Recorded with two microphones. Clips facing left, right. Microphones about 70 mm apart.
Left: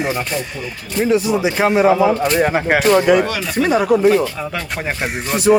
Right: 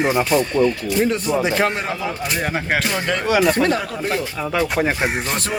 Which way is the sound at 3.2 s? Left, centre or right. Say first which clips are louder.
Right 6 dB; centre.